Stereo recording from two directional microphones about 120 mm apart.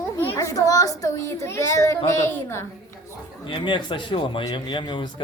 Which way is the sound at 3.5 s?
45° left (ahead or behind).